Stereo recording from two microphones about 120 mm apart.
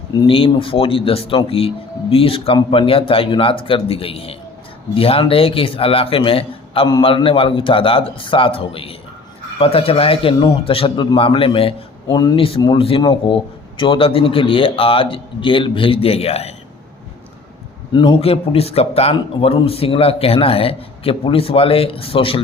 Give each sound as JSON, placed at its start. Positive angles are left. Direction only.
{"t": 0.3, "sound": "speech", "side_deg": 50}
{"t": 17.9, "sound": "a man's voice", "side_deg": 40}
{"t": 18.2, "sound": "speech", "side_deg": 55}